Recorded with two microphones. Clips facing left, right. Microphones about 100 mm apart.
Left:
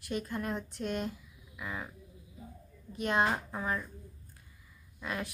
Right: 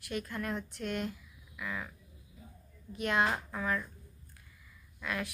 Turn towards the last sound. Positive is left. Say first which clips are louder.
# even
turn(degrees=30)  # may be behind; listen again after turning